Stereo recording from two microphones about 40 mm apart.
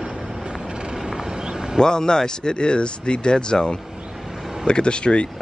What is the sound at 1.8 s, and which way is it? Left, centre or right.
Speech, centre.